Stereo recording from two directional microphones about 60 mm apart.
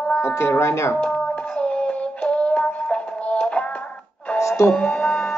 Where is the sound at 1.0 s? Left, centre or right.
Centre.